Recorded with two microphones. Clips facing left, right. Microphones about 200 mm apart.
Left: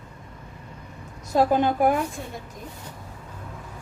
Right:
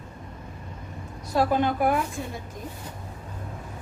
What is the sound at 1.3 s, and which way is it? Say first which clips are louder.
Speech: left 3 dB; 45° left (ahead or behind).